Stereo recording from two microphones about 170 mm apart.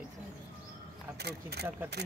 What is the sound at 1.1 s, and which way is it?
Speech, 75° right (ahead or behind).